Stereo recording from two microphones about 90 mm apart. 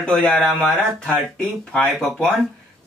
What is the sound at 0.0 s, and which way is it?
Speech, 10° left (ahead or behind).